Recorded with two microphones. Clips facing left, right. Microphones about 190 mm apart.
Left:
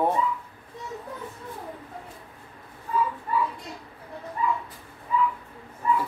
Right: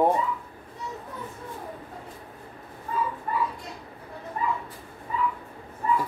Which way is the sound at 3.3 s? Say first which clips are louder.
Left 2 dB; 50° right (ahead or behind).